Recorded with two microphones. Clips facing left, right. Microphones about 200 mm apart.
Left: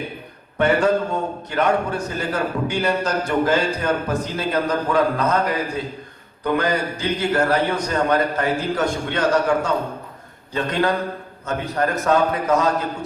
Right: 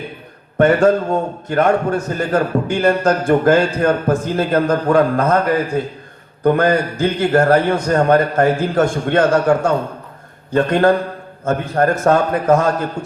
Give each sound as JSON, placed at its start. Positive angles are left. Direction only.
{"t": 0.6, "sound": "a man's voice", "side_deg": -50}